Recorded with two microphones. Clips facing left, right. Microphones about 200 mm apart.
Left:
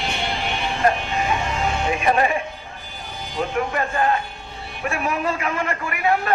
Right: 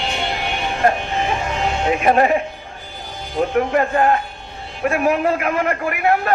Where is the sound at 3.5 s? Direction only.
50° right (ahead or behind).